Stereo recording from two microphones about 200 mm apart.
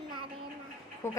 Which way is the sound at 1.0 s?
10° left (ahead or behind).